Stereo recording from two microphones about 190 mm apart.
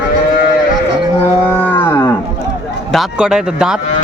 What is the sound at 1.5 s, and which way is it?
Cattle, 10° left (ahead or behind).